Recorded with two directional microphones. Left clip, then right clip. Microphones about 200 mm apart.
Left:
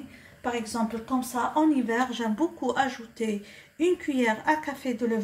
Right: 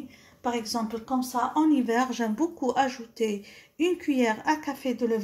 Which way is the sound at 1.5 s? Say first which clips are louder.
Even; 35° right (ahead or behind).